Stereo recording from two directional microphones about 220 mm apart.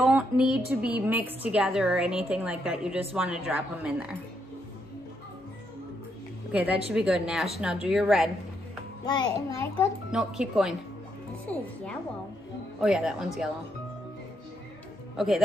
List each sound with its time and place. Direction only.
0.0 s a woman's voice: 5° right (ahead or behind)
6.5 s a woman's voice: 5° right (ahead or behind)
9.0 s a child's voice: 20° left (ahead or behind)
10.1 s a woman's voice: centre (ahead or behind)
15.1 s a woman's voice: centre (ahead or behind)